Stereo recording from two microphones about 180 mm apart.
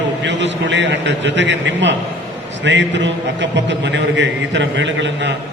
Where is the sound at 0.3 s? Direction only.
80° right.